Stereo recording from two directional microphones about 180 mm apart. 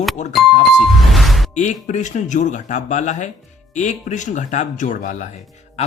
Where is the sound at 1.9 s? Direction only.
40° left (ahead or behind).